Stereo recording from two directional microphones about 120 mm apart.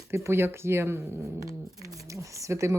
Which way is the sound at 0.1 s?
20° right (ahead or behind).